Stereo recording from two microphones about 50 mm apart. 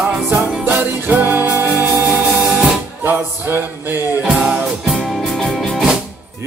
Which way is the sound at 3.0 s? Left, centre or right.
Right.